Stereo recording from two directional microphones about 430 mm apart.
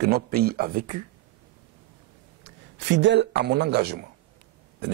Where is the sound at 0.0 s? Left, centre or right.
Right.